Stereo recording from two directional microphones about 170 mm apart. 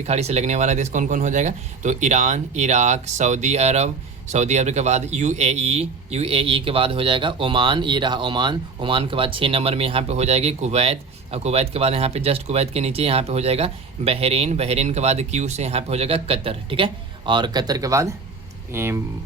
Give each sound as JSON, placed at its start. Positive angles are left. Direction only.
{"t": 0.0, "sound": "speech", "side_deg": -40}